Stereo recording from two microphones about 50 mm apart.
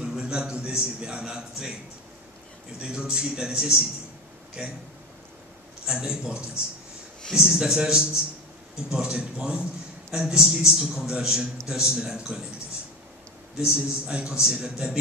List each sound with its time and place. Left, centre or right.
0.0 s a man's voice: centre
2.8 s a man's voice: centre
5.9 s a man's voice: centre
13.6 s a man's voice: centre